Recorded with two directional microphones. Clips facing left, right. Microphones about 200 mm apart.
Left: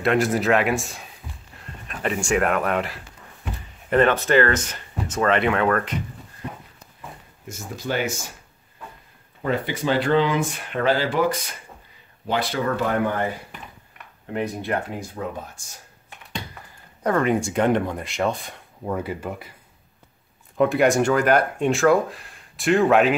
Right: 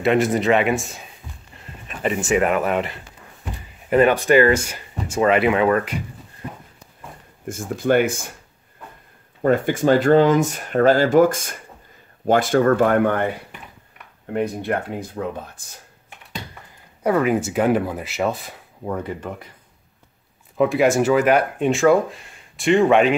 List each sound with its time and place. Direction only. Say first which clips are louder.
0.0 s speech: right 3 dB; centre (ahead or behind)
3.9 s speech: right 3 dB; 10° right (ahead or behind)
7.4 s speech: right 9 dB; 55° right (ahead or behind)
9.4 s speech: right 7 dB; 50° right (ahead or behind)
14.3 s speech: right 3 dB; 55° right (ahead or behind)
17.0 s speech: right 2 dB; 5° right (ahead or behind)
20.5 s speech: right 1 dB; centre (ahead or behind)